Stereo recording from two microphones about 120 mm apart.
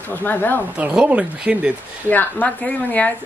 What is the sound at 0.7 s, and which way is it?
Speech, 10° right (ahead or behind).